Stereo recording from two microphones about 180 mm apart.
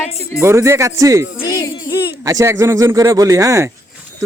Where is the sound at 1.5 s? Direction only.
20° left (ahead or behind).